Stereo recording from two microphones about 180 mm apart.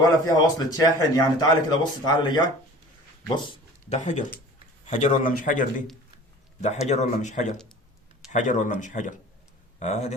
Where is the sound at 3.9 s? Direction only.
40° left (ahead or behind).